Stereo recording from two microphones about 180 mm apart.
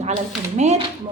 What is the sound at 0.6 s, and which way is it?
Speech, 40° right (ahead or behind).